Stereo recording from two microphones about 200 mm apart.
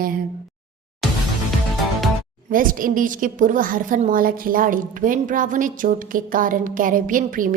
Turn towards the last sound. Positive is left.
turn(degrees=-45)  # may be behind; listen again after turning